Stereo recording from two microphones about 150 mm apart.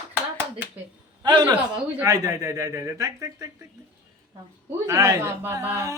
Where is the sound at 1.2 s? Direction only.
30° right (ahead or behind).